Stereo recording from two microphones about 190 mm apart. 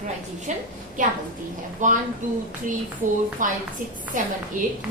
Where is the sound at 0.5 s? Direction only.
40° right (ahead or behind).